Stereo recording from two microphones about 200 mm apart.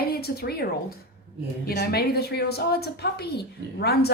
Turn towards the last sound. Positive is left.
turn(degrees=55)  # may be behind; listen again after turning